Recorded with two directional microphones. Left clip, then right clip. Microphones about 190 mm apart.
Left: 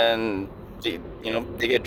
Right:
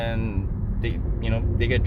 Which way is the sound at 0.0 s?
45° left (ahead or behind).